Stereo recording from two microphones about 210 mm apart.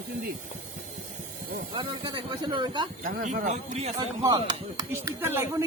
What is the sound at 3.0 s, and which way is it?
Speech, 40° right (ahead or behind).